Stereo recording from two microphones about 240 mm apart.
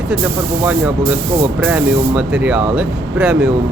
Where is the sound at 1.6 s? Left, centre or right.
Centre.